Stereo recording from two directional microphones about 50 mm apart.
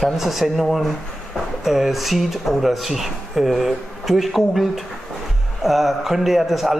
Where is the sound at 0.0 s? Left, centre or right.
Centre.